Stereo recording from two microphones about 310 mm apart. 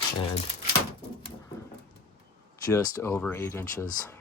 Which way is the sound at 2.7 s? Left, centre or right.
Centre.